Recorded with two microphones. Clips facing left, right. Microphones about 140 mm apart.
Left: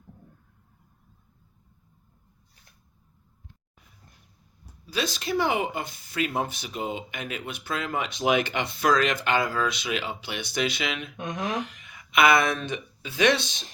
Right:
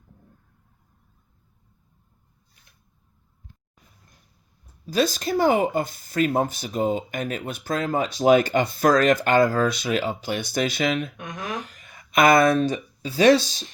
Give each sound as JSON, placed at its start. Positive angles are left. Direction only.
{"t": 4.9, "sound": "speech", "side_deg": -45}
{"t": 11.2, "sound": "speech", "side_deg": 20}
{"t": 11.7, "sound": "a sound", "side_deg": -50}
{"t": 12.6, "sound": "speech", "side_deg": -40}